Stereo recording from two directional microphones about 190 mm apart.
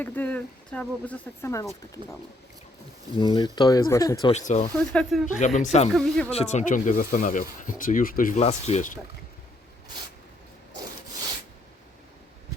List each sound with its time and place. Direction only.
0.0 s speech: 5° left (ahead or behind)
3.2 s speech: 20° left (ahead or behind)
4.3 s speech: 35° left (ahead or behind)
4.8 s speech: 5° left (ahead or behind)
5.5 s speech: 40° left (ahead or behind)
5.9 s speech: centre (ahead or behind)
6.3 s speech: 35° left (ahead or behind)